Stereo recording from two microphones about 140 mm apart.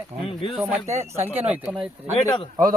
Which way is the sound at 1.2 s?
15° right (ahead or behind).